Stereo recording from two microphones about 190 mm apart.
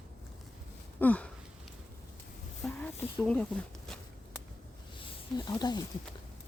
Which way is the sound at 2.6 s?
5° left (ahead or behind).